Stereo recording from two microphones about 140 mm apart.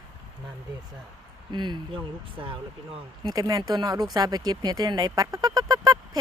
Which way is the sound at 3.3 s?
25° right (ahead or behind).